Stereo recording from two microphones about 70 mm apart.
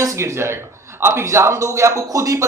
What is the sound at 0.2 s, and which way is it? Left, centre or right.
Speech, right.